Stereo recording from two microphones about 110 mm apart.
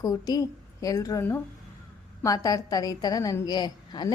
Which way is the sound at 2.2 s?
30° left (ahead or behind).